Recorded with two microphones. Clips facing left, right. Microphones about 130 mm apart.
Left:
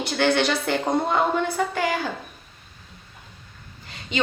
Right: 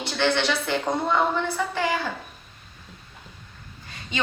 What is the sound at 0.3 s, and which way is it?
A woman's voice, 50° left (ahead or behind).